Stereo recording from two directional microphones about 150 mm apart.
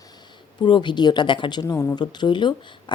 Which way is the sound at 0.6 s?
30° left (ahead or behind).